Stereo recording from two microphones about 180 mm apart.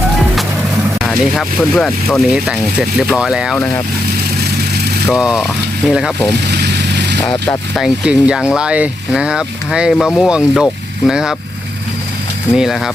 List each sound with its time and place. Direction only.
1.0 s speech: centre (ahead or behind)
5.0 s speech: centre (ahead or behind)
6.5 s vehicle: 70° right (ahead or behind)
7.8 s speech: 5° right (ahead or behind)
12.5 s speech: centre (ahead or behind)